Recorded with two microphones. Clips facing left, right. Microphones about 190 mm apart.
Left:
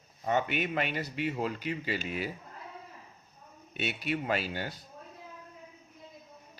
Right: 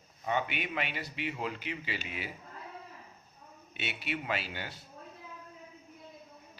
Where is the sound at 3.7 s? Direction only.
40° left (ahead or behind).